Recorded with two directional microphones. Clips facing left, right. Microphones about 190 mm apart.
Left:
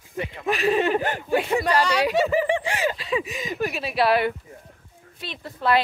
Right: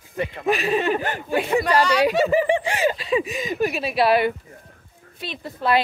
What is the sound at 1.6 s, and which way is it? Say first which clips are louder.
Speech: right 3 dB; 25° left (ahead or behind).